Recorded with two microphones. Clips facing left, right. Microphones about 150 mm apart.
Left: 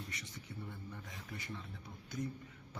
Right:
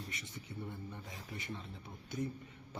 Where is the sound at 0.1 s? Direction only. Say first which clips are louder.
Right 2 dB; 25° right (ahead or behind).